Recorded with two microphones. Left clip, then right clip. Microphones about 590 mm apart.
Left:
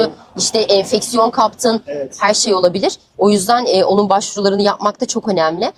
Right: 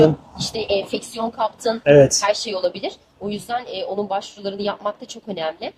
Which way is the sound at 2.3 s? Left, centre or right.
Left.